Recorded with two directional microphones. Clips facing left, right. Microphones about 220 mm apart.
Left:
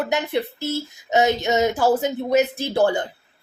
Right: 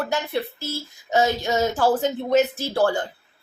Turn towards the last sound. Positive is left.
turn(degrees=20)  # may be behind; listen again after turning